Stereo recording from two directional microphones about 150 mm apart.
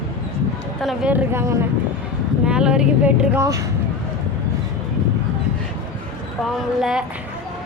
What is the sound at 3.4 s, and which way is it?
Speech, 20° right (ahead or behind).